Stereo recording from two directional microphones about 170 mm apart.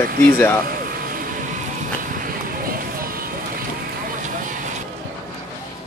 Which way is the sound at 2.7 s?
60° right (ahead or behind).